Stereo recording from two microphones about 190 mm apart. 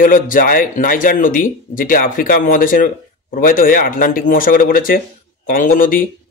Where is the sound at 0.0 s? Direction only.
45° left (ahead or behind).